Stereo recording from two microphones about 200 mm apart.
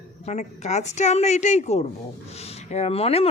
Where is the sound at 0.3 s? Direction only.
35° left (ahead or behind).